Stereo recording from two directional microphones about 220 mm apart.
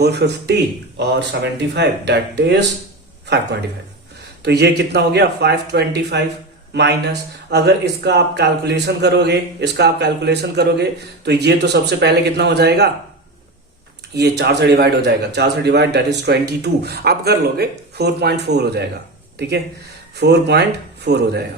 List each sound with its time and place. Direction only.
0.0 s a man's voice: 50° right (ahead or behind)
14.1 s a man's voice: 50° right (ahead or behind)